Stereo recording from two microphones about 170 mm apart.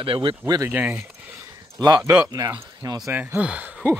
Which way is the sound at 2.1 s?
20° right (ahead or behind).